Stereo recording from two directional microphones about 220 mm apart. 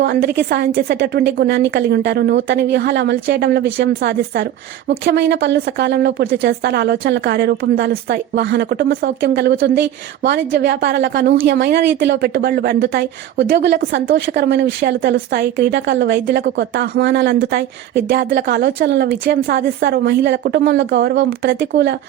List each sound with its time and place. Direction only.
0.0 s a woman's voice: 45° right (ahead or behind)